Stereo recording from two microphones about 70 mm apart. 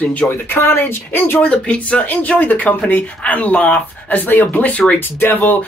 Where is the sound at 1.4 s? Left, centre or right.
Centre.